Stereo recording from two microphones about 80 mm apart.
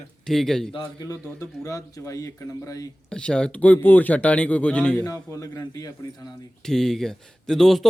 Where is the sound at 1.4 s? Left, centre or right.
Left.